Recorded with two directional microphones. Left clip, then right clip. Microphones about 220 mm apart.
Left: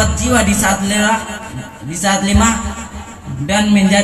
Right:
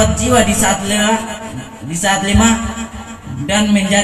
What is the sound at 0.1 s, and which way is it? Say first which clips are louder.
Speech: right 2 dB; 30° right (ahead or behind).